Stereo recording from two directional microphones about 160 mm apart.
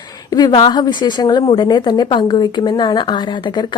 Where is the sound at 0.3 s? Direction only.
25° left (ahead or behind).